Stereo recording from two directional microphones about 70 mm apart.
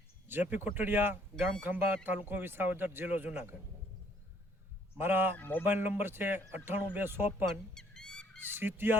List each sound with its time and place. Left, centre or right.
0.3 s speech: right
4.9 s speech: right
5.4 s speech: left
5.6 s speech: right
7.4 s goose: centre
8.5 s speech: right